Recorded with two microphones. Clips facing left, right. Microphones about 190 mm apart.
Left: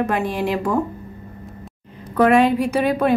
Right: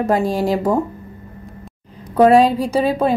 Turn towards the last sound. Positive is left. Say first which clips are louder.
# right 1 dB
turn(degrees=-30)  # may be behind; listen again after turning